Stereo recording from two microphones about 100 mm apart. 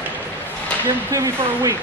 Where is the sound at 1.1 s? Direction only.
30° right (ahead or behind).